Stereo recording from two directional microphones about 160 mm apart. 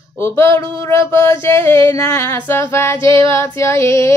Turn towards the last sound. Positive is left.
turn(degrees=15)  # may be behind; listen again after turning